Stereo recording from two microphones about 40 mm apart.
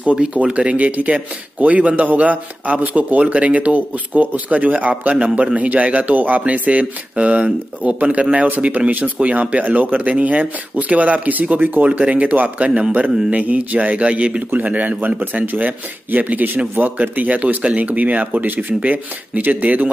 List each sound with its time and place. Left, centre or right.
0.0 s speech: right
14.5 s speech: right